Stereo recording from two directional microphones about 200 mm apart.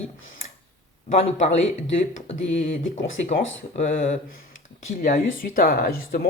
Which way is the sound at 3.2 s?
35° left (ahead or behind).